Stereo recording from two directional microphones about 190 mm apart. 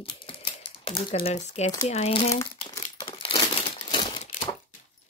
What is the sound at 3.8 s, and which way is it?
Typewriter, 25° left (ahead or behind).